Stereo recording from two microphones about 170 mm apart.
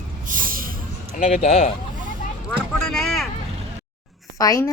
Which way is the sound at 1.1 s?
45° left (ahead or behind).